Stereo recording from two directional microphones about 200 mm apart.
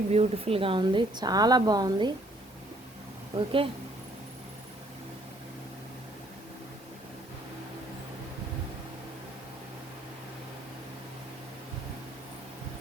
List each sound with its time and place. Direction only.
0.1 s a woman's voice: 30° right (ahead or behind)
3.3 s a woman's voice: 25° right (ahead or behind)